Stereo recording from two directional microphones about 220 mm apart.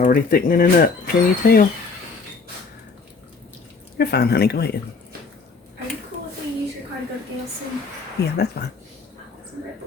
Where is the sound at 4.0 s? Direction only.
45° left (ahead or behind).